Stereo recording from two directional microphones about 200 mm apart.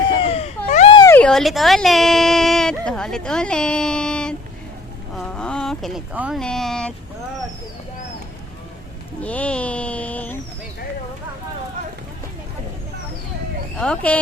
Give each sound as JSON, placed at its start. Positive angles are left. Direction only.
{"t": 0.2, "sound": "baby cry", "side_deg": 30}
{"t": 0.9, "sound": "speech", "side_deg": 10}
{"t": 5.1, "sound": "a sound", "side_deg": 5}
{"t": 6.4, "sound": "speech", "side_deg": 0}
{"t": 9.2, "sound": "speech", "side_deg": 5}
{"t": 13.7, "sound": "speech", "side_deg": 5}